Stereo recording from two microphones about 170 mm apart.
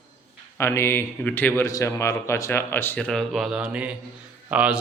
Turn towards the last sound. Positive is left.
turn(degrees=-10)  # may be behind; listen again after turning